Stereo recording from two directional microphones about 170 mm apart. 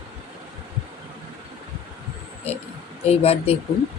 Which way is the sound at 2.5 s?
35° left (ahead or behind).